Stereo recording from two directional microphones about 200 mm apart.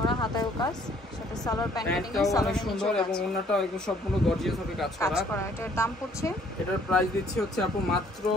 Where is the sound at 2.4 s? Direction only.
5° left (ahead or behind).